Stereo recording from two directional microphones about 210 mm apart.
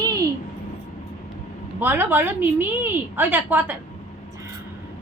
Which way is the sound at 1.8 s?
10° right (ahead or behind).